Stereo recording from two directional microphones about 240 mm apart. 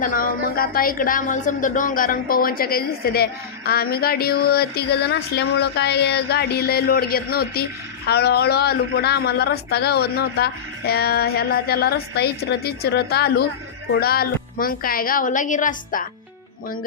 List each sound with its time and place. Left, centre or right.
0.0 s speech: left